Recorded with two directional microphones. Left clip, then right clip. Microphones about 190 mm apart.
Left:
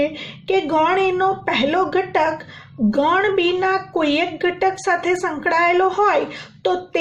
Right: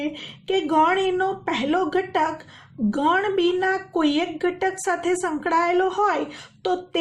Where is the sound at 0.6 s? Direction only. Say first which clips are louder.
Left 1 dB; 40° right (ahead or behind).